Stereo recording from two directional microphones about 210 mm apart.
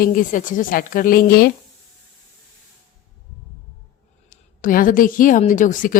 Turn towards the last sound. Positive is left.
turn(degrees=40)  # may be behind; listen again after turning